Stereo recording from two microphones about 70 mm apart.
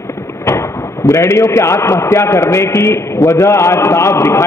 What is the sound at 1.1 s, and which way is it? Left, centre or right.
A man's voice, left.